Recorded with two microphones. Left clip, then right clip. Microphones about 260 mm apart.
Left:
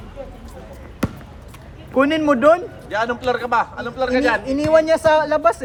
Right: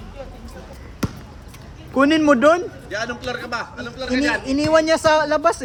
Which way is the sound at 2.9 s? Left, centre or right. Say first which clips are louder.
Left 7 dB; centre.